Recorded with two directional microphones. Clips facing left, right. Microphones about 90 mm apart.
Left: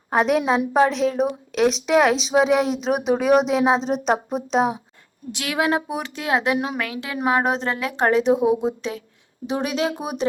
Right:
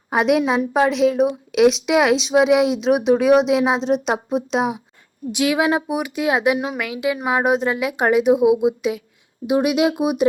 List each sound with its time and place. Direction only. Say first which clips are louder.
0.1 s a woman's voice: right 2 dB; centre (ahead or behind)
5.3 s speech: right 4 dB; 15° right (ahead or behind)